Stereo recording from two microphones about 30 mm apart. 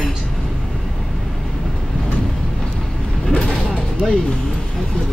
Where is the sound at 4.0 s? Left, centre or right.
Left.